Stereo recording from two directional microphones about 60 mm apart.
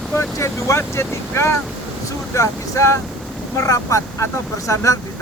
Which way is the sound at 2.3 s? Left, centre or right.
Left.